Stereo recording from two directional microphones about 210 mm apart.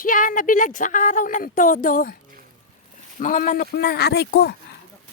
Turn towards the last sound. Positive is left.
turn(degrees=50)  # may be behind; listen again after turning